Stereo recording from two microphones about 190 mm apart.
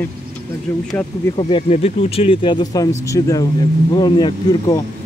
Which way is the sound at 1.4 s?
30° left (ahead or behind).